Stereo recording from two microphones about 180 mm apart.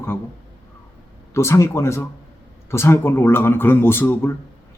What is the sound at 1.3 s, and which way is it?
Speech, 15° left (ahead or behind).